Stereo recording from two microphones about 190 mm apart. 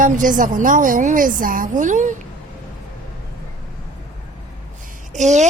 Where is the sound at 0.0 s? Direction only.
45° right (ahead or behind).